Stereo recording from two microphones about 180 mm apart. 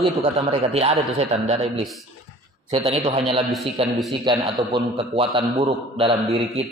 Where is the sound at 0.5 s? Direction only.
35° right (ahead or behind).